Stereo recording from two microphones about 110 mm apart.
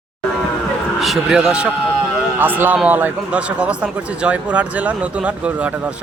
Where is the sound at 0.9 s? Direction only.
Centre (ahead or behind).